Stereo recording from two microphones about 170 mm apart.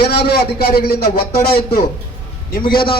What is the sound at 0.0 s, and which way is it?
Speech, 70° left (ahead or behind).